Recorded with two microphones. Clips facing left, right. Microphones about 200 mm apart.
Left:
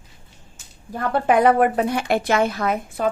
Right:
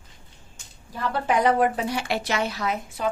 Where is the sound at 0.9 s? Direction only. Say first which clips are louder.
Left 5 dB; 50° left (ahead or behind).